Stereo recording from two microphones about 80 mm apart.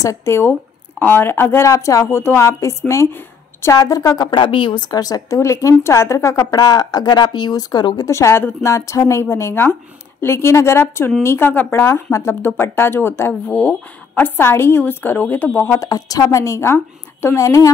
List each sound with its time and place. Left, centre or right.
0.0 s speech: left
0.5 s a woman's voice: left
4.3 s a woman's voice: left
6.6 s speech: left
8.1 s speech: left
13.5 s a woman's voice: centre
15.8 s speech: left